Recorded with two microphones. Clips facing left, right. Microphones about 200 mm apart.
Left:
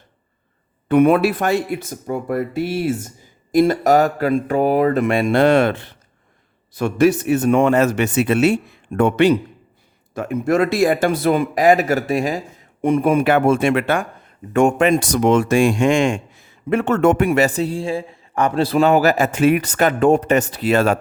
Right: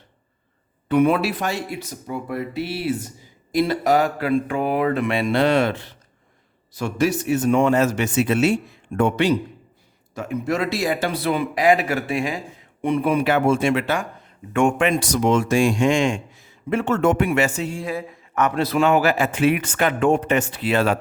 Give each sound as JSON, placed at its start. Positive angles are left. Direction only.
{"t": 0.9, "sound": "speech", "side_deg": 50}
{"t": 14.5, "sound": "speech", "side_deg": 40}